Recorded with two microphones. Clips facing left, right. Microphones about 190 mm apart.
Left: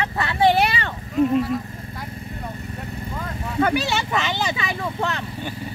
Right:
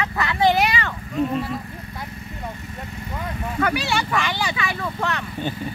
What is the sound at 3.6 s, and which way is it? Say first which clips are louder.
Vehicle: left 2 dB; 25° left (ahead or behind).